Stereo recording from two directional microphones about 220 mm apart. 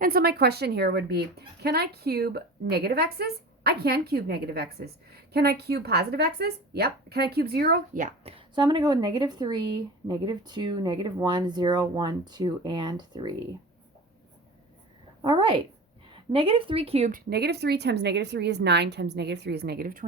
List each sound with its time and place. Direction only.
0.0 s speech: 45° right (ahead or behind)
8.4 s speech: 20° right (ahead or behind)
15.2 s speech: 20° right (ahead or behind); by 20.1 s 40° right (ahead or behind)